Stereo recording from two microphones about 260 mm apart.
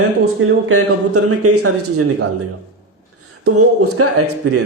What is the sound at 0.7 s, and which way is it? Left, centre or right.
A man's voice, right.